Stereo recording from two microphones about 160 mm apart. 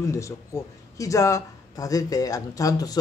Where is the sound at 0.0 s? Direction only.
20° left (ahead or behind).